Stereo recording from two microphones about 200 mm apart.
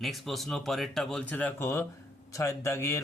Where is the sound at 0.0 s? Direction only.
Centre (ahead or behind).